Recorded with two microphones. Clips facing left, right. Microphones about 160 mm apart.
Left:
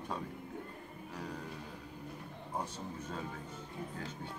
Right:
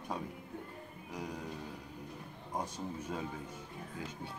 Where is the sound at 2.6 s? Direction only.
10° right (ahead or behind).